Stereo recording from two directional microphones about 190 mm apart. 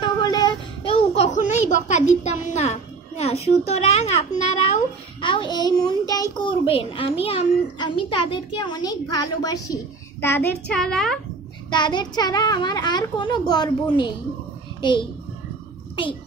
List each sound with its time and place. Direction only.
0.0 s child singing: 20° left (ahead or behind); by 1.8 s 40° left (ahead or behind)
1.9 s a child's voice: 40° left (ahead or behind); by 9.8 s 20° left (ahead or behind)
10.2 s child singing: 10° left (ahead or behind)
10.7 s a woman's voice: 5° left (ahead or behind)
11.7 s a child's voice: 25° left (ahead or behind)
14.8 s a child's voice: 25° left (ahead or behind)